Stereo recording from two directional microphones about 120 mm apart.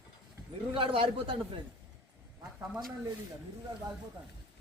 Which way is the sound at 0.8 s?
50° right (ahead or behind).